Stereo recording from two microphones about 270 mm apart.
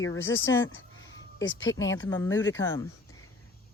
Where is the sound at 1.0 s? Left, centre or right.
Left.